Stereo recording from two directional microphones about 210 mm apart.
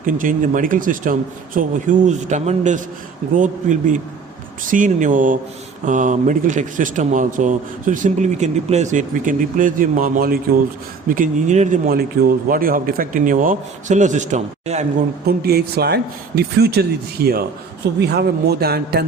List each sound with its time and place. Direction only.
0.0 s speech: 40° right (ahead or behind)
15.3 s speech: 50° right (ahead or behind)